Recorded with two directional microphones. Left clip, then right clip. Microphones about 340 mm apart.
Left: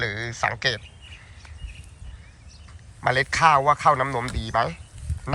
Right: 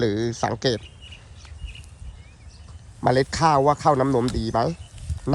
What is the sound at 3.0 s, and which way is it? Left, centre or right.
Speech, centre.